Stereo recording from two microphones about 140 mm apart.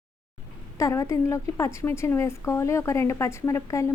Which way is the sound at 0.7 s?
20° left (ahead or behind).